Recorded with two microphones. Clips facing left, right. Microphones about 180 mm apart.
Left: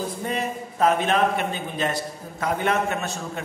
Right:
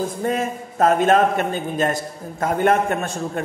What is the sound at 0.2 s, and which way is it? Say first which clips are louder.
A man's voice: right 5 dB; 50° right (ahead or behind).